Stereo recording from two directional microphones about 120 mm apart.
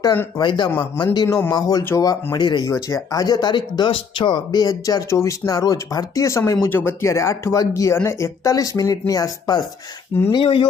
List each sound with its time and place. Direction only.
0.3 s speech: 40° left (ahead or behind)
1.8 s speech: 20° left (ahead or behind)
2.3 s speech: 35° left (ahead or behind)